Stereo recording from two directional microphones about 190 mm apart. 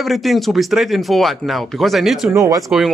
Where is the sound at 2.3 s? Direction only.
15° right (ahead or behind).